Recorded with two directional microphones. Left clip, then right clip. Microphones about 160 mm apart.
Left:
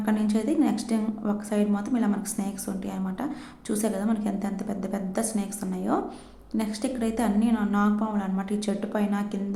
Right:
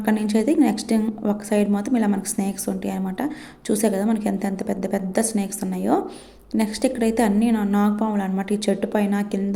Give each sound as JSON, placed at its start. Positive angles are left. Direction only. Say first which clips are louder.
{"t": 0.0, "sound": "a woman's voice", "louder": "right 6 dB", "side_deg": -30}